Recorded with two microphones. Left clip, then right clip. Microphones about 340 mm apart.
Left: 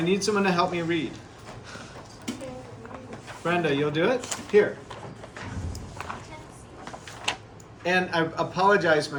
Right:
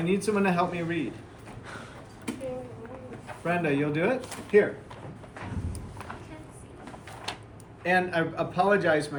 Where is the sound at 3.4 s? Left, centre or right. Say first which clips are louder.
Left 2 dB; centre.